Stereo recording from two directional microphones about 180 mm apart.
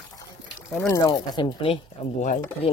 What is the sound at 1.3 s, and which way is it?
Speech, 30° left (ahead or behind).